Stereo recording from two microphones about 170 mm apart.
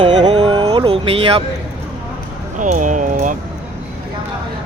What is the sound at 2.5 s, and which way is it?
Speech, 50° right (ahead or behind).